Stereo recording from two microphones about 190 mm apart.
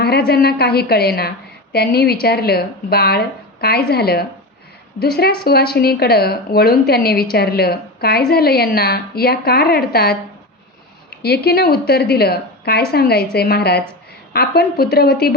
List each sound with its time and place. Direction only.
0.0 s a woman's voice: 55° left (ahead or behind)
11.2 s a woman's voice: 55° left (ahead or behind)